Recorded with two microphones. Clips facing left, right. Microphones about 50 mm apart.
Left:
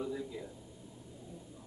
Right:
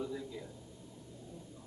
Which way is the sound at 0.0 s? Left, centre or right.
Centre.